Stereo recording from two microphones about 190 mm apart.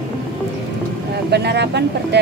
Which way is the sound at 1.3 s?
60° right (ahead or behind).